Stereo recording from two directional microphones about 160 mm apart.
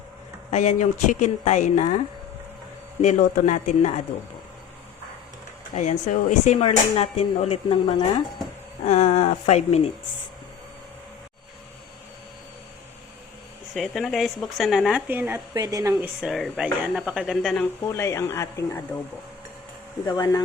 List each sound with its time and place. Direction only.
0.5 s speech: 45° left (ahead or behind)
3.0 s speech: 50° left (ahead or behind)
5.7 s speech: 50° left (ahead or behind); by 8.2 s 30° left (ahead or behind)
8.9 s speech: 45° left (ahead or behind)
13.7 s speech: centre (ahead or behind)
15.0 s a woman's voice: 10° right (ahead or behind)
15.5 s speech: 25° right (ahead or behind)
16.2 s speech: centre (ahead or behind)
17.8 s speech: 15° left (ahead or behind)
20.1 s speech: 20° left (ahead or behind)